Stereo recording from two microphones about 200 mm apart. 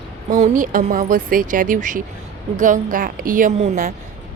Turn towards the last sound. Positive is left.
turn(degrees=-40)  # may be behind; listen again after turning